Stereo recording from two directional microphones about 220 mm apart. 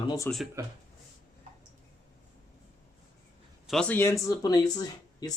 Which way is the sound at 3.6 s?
Centre (ahead or behind).